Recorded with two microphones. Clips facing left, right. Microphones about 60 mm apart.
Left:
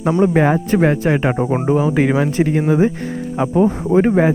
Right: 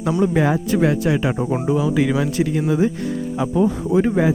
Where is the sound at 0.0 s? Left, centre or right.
Left.